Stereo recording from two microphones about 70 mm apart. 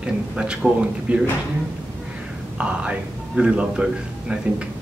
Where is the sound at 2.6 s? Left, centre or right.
Centre.